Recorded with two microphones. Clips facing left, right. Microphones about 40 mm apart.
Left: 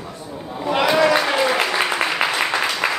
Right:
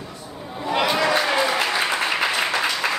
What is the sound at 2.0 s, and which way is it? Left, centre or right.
Applause, left.